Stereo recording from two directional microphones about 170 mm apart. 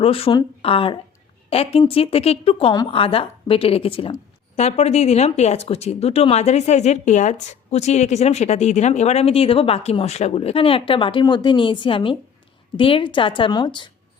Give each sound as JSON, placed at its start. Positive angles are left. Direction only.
{"t": 0.0, "sound": "a woman's voice", "side_deg": 35}